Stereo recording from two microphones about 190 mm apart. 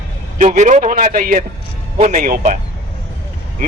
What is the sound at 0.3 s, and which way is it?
A man's voice, 40° right (ahead or behind).